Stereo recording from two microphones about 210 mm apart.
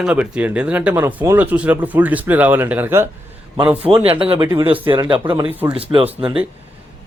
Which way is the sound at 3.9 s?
25° right (ahead or behind).